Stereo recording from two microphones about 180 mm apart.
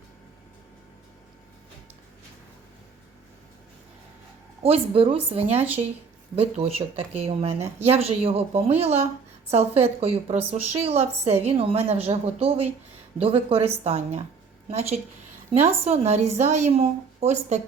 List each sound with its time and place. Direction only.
4.6 s a woman's voice: 30° right (ahead or behind)